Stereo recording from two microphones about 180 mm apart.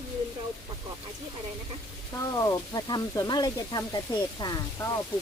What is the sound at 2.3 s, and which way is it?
Speech, 20° left (ahead or behind).